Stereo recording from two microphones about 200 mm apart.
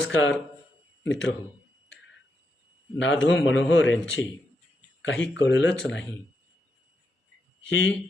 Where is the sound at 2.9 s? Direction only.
65° left (ahead or behind).